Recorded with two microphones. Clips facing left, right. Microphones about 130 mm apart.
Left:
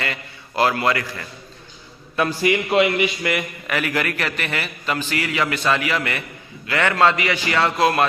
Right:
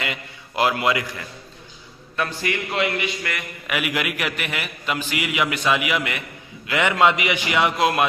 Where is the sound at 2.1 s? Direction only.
10° left (ahead or behind).